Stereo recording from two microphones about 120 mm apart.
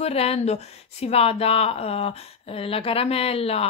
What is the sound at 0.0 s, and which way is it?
Speech, 55° left (ahead or behind).